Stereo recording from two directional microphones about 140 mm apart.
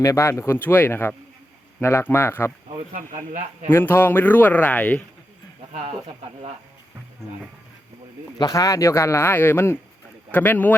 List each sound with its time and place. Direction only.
0.0 s speech: 20° left (ahead or behind)
2.9 s speech: 70° right (ahead or behind)
3.7 s speech: 15° left (ahead or behind)
8.4 s speech: 25° left (ahead or behind)